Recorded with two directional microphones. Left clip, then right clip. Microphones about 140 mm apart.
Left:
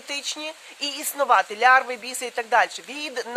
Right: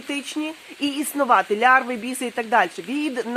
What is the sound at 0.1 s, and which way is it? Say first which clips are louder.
A woman's voice: right 2 dB; 30° right (ahead or behind).